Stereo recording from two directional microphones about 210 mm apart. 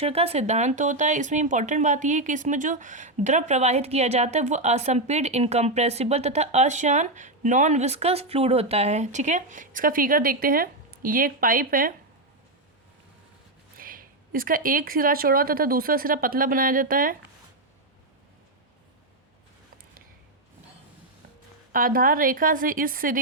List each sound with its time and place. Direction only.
0.0 s speech: 30° right (ahead or behind)
13.7 s speech: 40° right (ahead or behind)
21.7 s speech: 40° right (ahead or behind)